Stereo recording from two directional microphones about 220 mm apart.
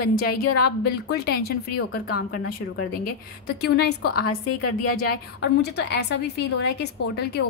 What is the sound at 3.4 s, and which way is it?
A woman's voice, 50° left (ahead or behind).